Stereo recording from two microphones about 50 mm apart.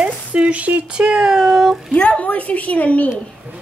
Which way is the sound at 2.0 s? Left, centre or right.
Left.